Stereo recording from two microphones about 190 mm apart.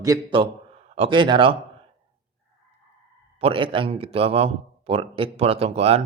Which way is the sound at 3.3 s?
30° right (ahead or behind).